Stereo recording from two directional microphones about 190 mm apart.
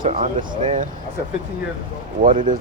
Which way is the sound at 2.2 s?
45° right (ahead or behind).